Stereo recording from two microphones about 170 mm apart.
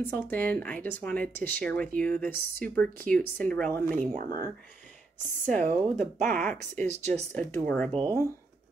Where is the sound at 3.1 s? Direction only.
5° left (ahead or behind).